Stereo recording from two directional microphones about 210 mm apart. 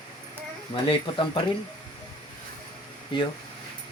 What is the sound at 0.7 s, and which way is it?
Speech, 25° left (ahead or behind).